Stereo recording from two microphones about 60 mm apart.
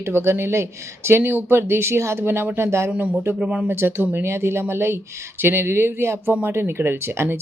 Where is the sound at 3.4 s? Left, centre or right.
Right.